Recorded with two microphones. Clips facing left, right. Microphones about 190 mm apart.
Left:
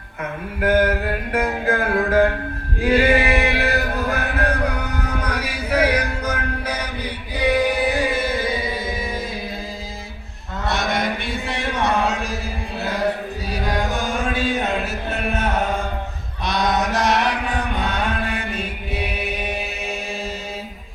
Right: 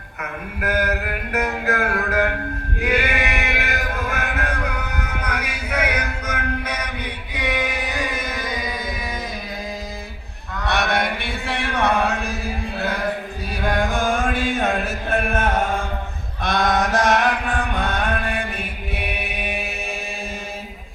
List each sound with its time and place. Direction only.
0.6 s music: 30° left (ahead or behind)
2.8 s chant: 30° left (ahead or behind)
10.7 s a sound: 60° right (ahead or behind)
13.5 s chant: 55° right (ahead or behind)
16.4 s mantra: 50° right (ahead or behind)